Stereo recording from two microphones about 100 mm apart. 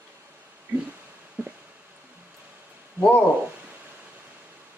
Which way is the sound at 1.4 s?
10° right (ahead or behind).